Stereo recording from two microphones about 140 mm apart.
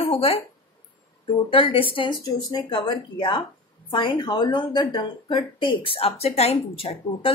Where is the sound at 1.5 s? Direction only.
40° left (ahead or behind).